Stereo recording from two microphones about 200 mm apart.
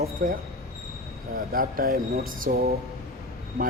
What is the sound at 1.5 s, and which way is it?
Speech, 45° right (ahead or behind).